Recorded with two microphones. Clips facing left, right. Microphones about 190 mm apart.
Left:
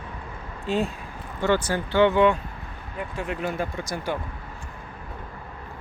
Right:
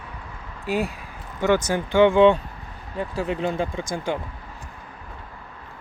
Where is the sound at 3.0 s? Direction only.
30° right (ahead or behind).